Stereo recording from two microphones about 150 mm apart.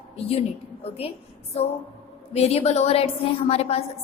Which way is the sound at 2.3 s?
45° left (ahead or behind).